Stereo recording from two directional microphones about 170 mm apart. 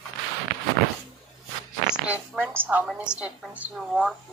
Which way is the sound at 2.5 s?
10° right (ahead or behind).